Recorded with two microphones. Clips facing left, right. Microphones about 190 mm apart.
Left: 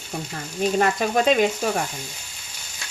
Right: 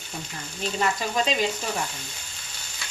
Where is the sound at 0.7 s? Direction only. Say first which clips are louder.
Left 4 dB; 55° left (ahead or behind).